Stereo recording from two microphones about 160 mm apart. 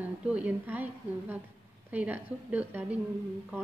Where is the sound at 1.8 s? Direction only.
10° right (ahead or behind).